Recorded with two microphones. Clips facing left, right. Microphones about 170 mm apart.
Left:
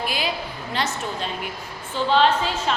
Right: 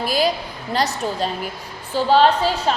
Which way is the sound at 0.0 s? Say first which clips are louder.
Right 7 dB; 40° right (ahead or behind).